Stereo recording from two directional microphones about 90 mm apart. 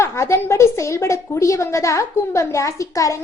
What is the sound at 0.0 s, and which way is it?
A woman's voice, 30° left (ahead or behind).